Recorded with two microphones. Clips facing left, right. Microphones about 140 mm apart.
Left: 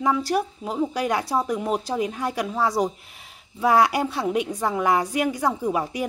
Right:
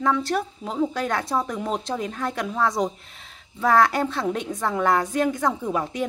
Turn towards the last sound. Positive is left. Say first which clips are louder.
# left 1 dB
turn(degrees=10)  # may be behind; listen again after turning